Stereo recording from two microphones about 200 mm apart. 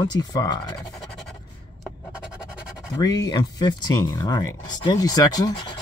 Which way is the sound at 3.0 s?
20° left (ahead or behind).